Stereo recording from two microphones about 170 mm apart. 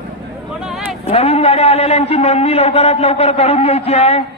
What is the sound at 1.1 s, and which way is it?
A man's voice, 35° left (ahead or behind).